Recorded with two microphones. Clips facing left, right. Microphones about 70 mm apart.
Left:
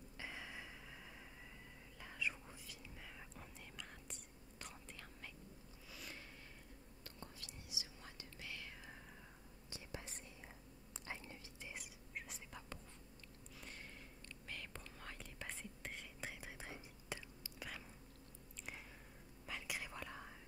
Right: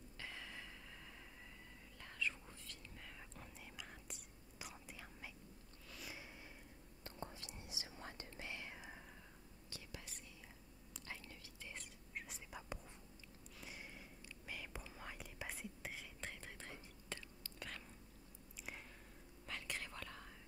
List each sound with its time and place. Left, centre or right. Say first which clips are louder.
0.2 s a sound: left 1 dB; centre
2.1 s whispering: even; centre
3.3 s whispering: even; centre
5.9 s a sound: right 1 dB; centre
7.2 s whispering: right 6 dB; right
7.7 s whispering: right 4 dB; right
9.7 s whispering: left 4 dB; left
11.7 s whispering: even; centre
12.3 s whispering: right 1 dB; centre
13.6 s a sound: right 1 dB; centre
14.5 s whispering: right 1 dB; centre
19.4 s whispering: left 1 dB; centre